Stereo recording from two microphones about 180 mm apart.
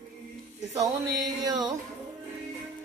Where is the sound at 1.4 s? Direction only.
20° right (ahead or behind).